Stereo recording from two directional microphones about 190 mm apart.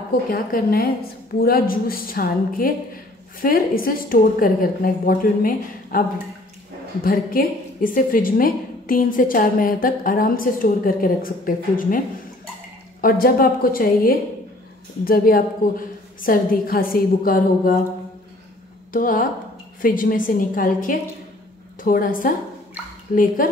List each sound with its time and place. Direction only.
0.3 s a woman's voice: 50° left (ahead or behind)
13.0 s a woman's voice: 50° left (ahead or behind)
18.9 s a woman's voice: 45° left (ahead or behind)